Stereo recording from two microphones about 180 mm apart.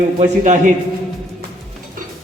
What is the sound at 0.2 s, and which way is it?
Speech, 45° right (ahead or behind).